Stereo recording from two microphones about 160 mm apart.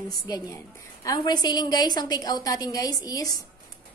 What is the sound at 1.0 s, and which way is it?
A woman's voice, 25° left (ahead or behind).